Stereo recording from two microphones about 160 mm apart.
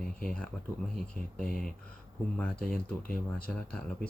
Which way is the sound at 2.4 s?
5° left (ahead or behind).